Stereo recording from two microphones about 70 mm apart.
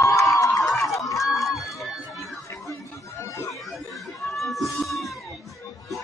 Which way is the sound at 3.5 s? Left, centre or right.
Centre.